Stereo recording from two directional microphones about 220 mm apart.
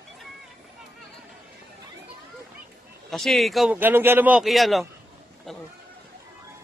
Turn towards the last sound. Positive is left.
turn(degrees=0)  # may be behind; listen again after turning